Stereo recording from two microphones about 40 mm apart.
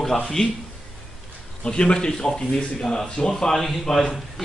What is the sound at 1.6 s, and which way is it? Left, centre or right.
Speech, left.